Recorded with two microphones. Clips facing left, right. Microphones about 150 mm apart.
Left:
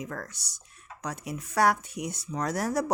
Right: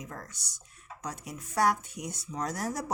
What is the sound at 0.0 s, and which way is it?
Speech, 80° left.